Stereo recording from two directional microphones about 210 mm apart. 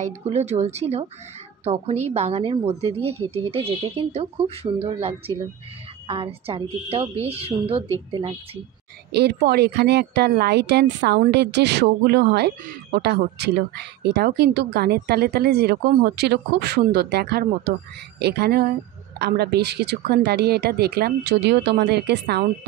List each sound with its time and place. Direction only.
0.0 s a woman's voice: 30° right (ahead or behind)
9.1 s speech: 50° right (ahead or behind)